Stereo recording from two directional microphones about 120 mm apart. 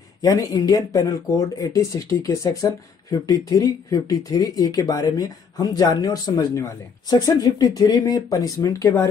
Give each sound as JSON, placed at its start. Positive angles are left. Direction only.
{"t": 0.2, "sound": "speech", "side_deg": 30}